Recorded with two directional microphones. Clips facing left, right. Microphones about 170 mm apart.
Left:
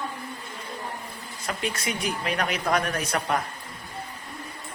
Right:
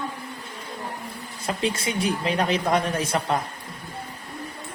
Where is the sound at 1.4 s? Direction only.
30° right (ahead or behind).